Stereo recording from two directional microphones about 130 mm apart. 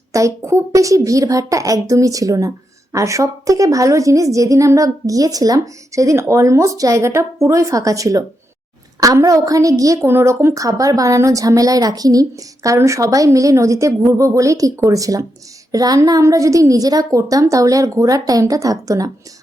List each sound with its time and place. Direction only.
0.1 s a woman's voice: 25° right (ahead or behind)